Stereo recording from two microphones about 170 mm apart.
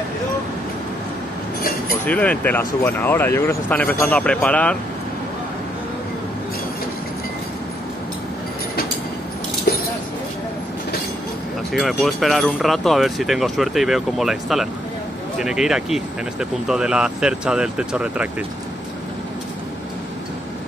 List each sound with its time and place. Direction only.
1.6 s chink: 60° left (ahead or behind)
2.0 s speech: 10° left (ahead or behind)
11.7 s speech: centre (ahead or behind)